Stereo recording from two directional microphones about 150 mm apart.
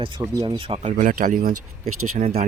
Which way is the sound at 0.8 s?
55° right (ahead or behind).